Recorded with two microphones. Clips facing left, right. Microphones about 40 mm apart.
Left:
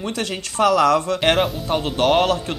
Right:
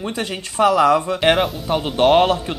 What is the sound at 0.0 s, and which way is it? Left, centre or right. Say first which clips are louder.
Speech: even; right.